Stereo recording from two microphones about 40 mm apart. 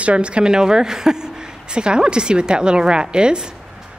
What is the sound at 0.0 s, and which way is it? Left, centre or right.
A woman's voice, right.